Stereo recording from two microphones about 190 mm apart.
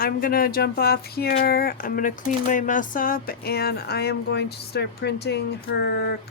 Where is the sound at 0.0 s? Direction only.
50° left (ahead or behind).